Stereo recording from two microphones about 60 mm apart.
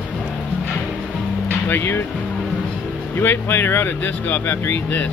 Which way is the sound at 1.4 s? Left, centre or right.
Left.